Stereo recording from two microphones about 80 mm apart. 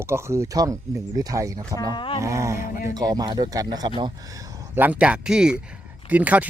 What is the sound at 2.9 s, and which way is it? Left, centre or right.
Speech, right.